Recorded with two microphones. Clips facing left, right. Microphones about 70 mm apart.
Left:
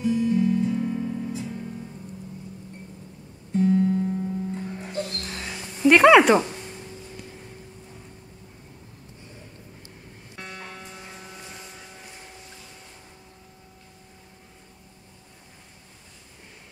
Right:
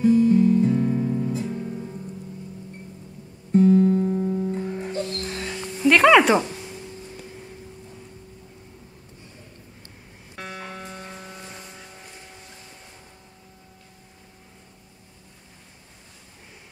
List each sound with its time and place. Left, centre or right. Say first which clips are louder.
0.0 s music: right 6 dB; right
3.5 s music: right 5 dB; right
4.6 s music: right 5 dB; centre
4.8 s music: right 3 dB; centre
5.2 s a sound: right 4 dB; centre
10.4 s music: right 4 dB; centre